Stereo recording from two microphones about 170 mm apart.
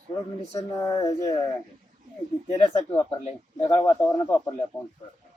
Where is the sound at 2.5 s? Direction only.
15° left (ahead or behind).